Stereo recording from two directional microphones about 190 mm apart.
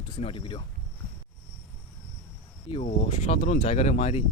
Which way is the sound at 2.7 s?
30° left (ahead or behind).